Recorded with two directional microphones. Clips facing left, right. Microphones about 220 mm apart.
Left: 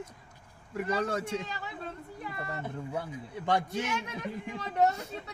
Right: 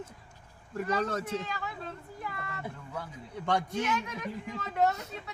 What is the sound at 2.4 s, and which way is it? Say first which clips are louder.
Speech: left 4 dB; 35° left (ahead or behind).